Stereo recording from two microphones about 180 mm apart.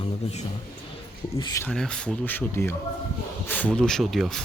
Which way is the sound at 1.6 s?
5° left (ahead or behind).